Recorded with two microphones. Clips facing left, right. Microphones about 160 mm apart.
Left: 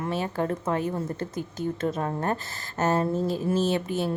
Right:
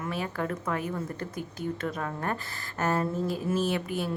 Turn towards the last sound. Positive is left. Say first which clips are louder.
# left 4 dB
turn(degrees=30)  # may be behind; listen again after turning